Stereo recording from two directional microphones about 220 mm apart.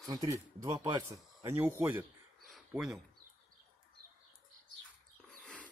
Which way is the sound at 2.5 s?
Centre (ahead or behind).